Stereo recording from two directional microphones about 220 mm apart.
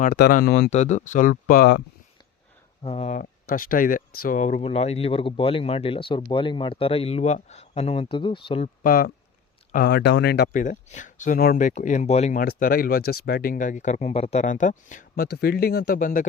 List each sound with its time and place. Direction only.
0.0 s speech: 40° left (ahead or behind)
2.8 s speech: 30° left (ahead or behind)
8.8 s speech: 40° left (ahead or behind)